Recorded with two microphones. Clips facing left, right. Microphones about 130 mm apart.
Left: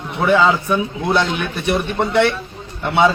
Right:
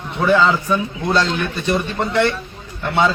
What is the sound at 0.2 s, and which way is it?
A man's voice, 10° left (ahead or behind).